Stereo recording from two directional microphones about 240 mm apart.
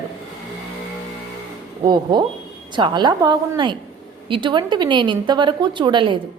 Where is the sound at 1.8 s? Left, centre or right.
Centre.